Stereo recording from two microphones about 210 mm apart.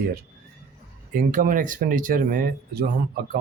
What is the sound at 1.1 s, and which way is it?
Speech, 40° right (ahead or behind).